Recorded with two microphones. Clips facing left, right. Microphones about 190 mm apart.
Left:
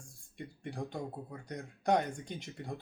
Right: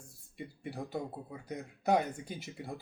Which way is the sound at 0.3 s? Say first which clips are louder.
Even; 5° right (ahead or behind).